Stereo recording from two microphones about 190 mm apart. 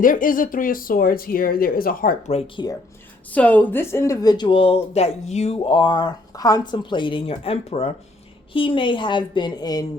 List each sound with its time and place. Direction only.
0.0 s speech: 45° left (ahead or behind)
3.3 s speech: 10° left (ahead or behind)